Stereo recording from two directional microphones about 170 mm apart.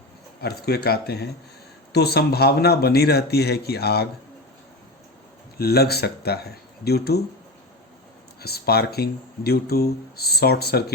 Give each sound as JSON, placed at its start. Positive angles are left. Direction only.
{"t": 0.4, "sound": "speech", "side_deg": 70}
{"t": 5.5, "sound": "speech", "side_deg": 65}
{"t": 8.4, "sound": "speech", "side_deg": 65}